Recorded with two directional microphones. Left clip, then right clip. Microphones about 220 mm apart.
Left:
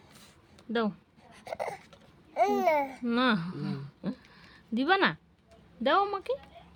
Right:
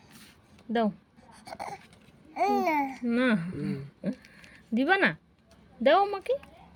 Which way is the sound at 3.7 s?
5° left (ahead or behind).